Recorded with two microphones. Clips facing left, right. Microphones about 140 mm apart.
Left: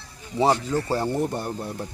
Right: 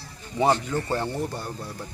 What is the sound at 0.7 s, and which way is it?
Speech, 10° left (ahead or behind).